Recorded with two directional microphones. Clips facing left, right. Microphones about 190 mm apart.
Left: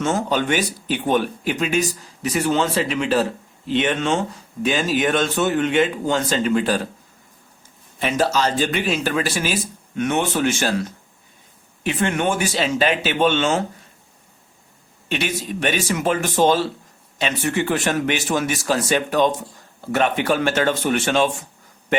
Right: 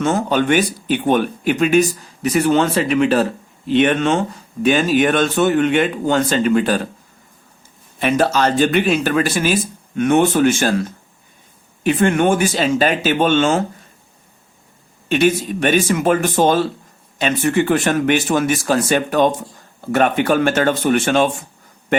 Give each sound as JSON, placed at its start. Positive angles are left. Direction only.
{"t": 0.0, "sound": "speech", "side_deg": -55}
{"t": 7.9, "sound": "speech", "side_deg": -60}
{"t": 15.1, "sound": "speech", "side_deg": -50}